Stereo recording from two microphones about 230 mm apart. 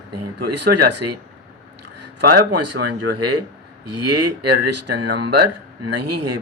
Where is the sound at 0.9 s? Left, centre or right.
Right.